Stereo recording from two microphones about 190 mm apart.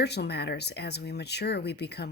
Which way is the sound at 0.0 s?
60° left (ahead or behind).